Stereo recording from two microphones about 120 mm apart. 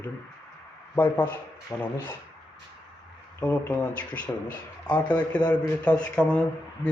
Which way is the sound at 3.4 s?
10° left (ahead or behind).